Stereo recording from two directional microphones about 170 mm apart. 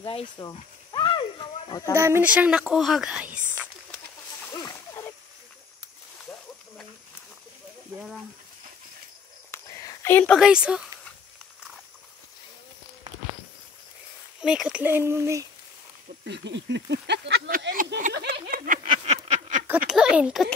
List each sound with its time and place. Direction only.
0.0 s a sound: 30° left (ahead or behind)
2.0 s a woman's voice: 15° right (ahead or behind)
4.6 s splash: 20° left (ahead or behind)
9.5 s a sound: 15° left (ahead or behind)
10.3 s a woman's voice: 5° right (ahead or behind)
14.4 s speech: 5° right (ahead or behind)
16.3 s speech: 90° right; by 18.9 s 55° right (ahead or behind)
18.9 s a sound: 40° right (ahead or behind)
19.9 s a woman's voice: 5° right (ahead or behind)